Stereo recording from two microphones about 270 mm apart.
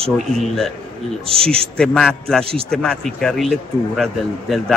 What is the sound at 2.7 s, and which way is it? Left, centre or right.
A man's voice, centre.